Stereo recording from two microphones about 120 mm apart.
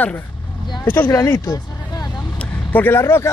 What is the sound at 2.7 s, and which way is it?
Speech, 15° left (ahead or behind).